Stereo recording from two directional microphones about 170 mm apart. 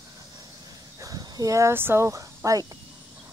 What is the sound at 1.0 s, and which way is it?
Speech, 20° right (ahead or behind).